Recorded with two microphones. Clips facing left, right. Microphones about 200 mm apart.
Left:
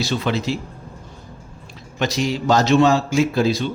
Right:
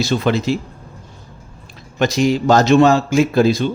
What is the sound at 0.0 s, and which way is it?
Speech, 50° right (ahead or behind).